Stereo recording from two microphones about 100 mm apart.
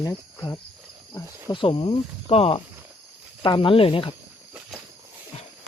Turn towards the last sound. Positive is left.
turn(degrees=65)  # may be behind; listen again after turning